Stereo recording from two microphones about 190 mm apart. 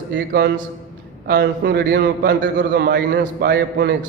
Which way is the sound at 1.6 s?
60° right (ahead or behind).